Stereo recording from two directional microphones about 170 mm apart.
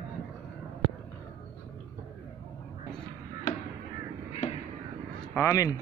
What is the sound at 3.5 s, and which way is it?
Chop, 45° left (ahead or behind).